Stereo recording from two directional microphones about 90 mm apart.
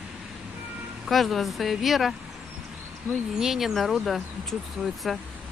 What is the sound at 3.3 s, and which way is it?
Speech, 5° right (ahead or behind).